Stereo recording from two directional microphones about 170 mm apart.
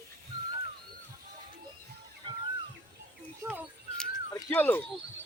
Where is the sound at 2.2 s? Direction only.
25° right (ahead or behind).